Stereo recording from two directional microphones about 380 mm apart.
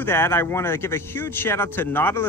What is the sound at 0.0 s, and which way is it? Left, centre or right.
Speech, centre.